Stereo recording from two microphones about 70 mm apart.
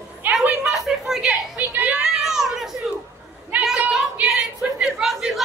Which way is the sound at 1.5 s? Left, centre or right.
Right.